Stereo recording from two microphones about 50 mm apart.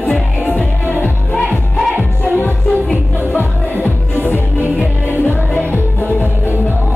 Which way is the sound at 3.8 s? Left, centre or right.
Left.